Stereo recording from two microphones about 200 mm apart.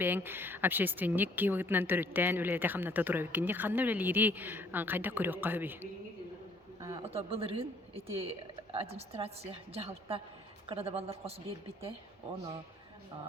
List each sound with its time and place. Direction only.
0.0 s speech: 10° right (ahead or behind)
7.0 s a woman's voice: 30° right (ahead or behind)